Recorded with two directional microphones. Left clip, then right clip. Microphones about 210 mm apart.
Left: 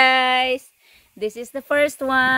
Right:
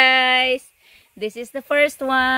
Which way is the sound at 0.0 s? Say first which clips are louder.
Right 1 dB; 15° left (ahead or behind).